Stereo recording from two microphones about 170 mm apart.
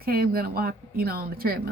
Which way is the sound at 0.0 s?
60° right (ahead or behind).